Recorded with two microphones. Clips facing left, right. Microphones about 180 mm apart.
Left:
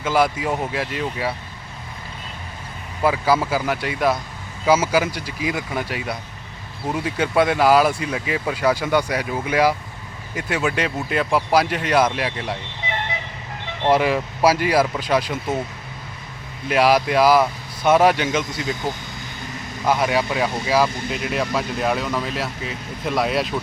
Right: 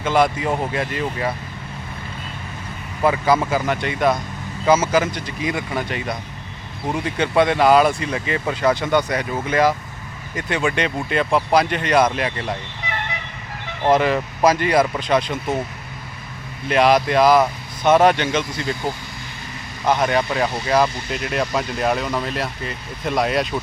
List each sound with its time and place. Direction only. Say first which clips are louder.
0.0 s speech: right 1 dB; 5° left (ahead or behind)
3.0 s speech: right 1 dB; 5° left (ahead or behind)
12.8 s vehicle: left 1 dB; 25° left (ahead or behind)
13.9 s speech: right 1 dB; 10° left (ahead or behind)
16.6 s speech: right 1 dB; 5° left (ahead or behind)